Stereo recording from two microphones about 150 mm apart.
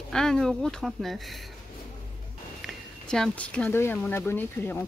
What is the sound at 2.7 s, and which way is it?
Speech, centre (ahead or behind).